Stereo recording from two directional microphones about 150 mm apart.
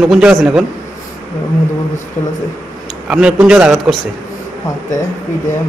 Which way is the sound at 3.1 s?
5° right (ahead or behind).